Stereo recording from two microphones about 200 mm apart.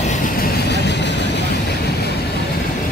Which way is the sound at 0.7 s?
60° left (ahead or behind).